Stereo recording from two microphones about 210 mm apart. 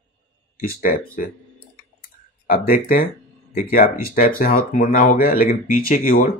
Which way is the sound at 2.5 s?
45° left (ahead or behind).